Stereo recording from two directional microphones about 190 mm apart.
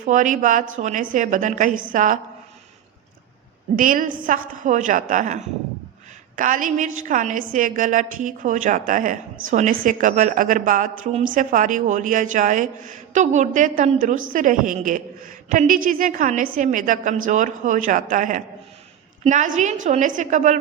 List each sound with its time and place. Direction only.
0.0 s a woman's voice: 45° right (ahead or behind)
3.8 s a woman's voice: 45° right (ahead or behind)